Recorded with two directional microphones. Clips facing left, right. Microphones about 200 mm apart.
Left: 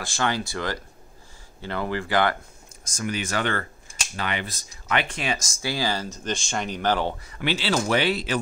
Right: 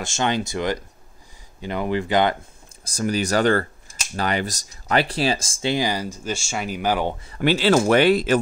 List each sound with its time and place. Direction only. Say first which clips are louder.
0.0 s speech: right 3 dB; 20° right (ahead or behind)
2.9 s speech: right 6 dB; 35° right (ahead or behind); by 7.2 s 10° right (ahead or behind)
7.3 s speech: right 8 dB; 45° right (ahead or behind)